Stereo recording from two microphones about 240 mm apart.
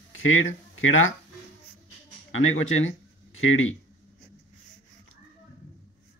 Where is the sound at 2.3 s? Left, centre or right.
Left.